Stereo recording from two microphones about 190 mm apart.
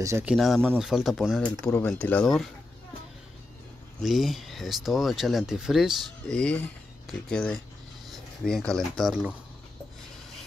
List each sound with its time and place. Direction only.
0.0 s speech: 10° right (ahead or behind); by 2.4 s 5° left (ahead or behind)
4.0 s speech: centre (ahead or behind)